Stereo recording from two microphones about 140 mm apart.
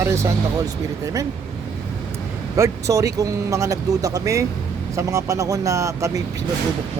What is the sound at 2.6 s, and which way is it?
Speech, 20° right (ahead or behind).